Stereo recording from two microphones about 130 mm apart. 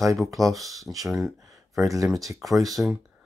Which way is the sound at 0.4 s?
Centre (ahead or behind).